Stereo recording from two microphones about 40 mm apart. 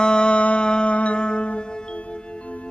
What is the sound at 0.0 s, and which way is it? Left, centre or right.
Music, left.